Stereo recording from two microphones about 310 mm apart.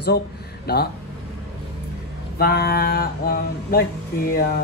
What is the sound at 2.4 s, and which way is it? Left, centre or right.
Mantra, left.